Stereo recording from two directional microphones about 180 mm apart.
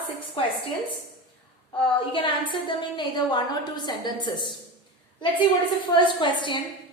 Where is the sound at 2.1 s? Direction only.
30° left (ahead or behind).